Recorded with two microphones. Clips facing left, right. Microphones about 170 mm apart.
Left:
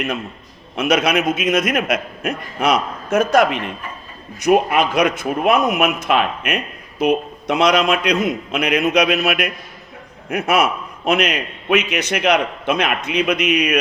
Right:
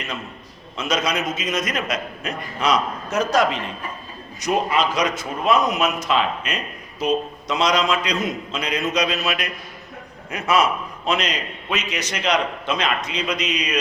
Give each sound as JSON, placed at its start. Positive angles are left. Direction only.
{"t": 0.8, "sound": "a man's voice", "side_deg": 60}